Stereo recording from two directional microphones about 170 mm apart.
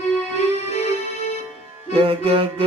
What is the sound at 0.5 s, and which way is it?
Music, 40° left (ahead or behind).